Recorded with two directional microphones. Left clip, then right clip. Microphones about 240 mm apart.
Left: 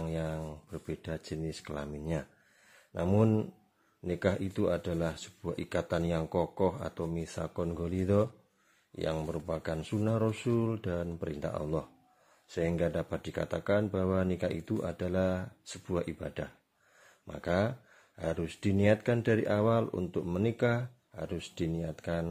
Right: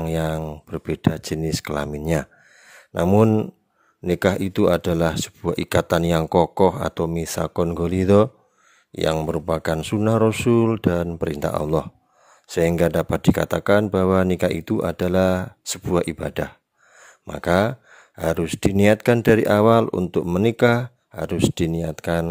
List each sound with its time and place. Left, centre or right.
0.0 s speech: right